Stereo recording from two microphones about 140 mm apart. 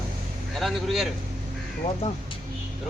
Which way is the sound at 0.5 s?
Centre (ahead or behind).